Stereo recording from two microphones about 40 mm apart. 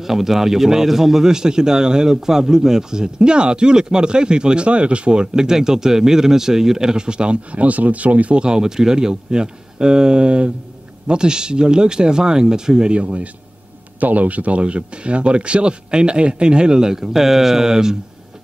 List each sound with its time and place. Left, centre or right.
0.0 s a man's voice: centre; by 8.5 s right
8.5 s speech: centre
12.9 s speech: right
13.9 s speech: right; by 17.9 s centre